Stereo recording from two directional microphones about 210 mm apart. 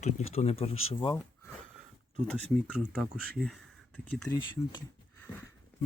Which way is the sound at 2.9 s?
Centre (ahead or behind).